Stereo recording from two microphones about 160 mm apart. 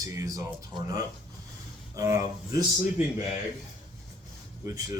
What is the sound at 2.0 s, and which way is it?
Speech, 20° right (ahead or behind).